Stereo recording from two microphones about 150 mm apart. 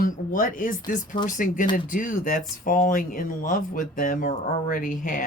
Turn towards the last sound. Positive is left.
turn(degrees=60)  # may be behind; listen again after turning